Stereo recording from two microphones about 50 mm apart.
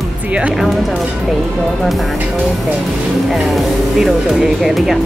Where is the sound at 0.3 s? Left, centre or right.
Right.